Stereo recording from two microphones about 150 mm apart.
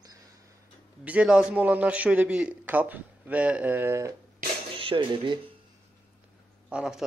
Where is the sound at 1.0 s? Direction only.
10° right (ahead or behind).